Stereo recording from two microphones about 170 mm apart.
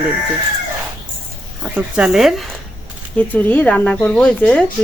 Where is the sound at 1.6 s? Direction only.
5° right (ahead or behind).